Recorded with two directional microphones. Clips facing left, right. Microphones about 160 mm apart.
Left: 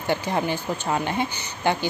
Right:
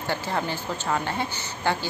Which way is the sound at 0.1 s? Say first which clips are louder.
Left 4 dB; 15° left (ahead or behind).